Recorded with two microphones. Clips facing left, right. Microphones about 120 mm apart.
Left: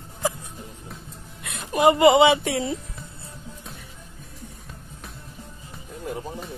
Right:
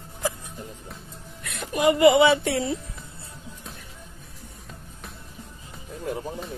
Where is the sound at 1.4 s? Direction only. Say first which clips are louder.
Left 4 dB; 25° left (ahead or behind).